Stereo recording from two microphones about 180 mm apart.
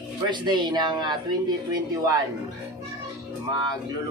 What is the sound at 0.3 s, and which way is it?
Speech, 25° right (ahead or behind).